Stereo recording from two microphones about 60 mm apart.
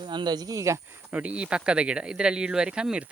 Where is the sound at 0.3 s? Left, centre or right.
Right.